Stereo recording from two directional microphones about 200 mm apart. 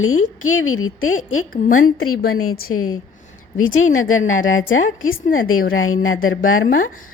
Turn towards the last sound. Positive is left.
turn(degrees=90)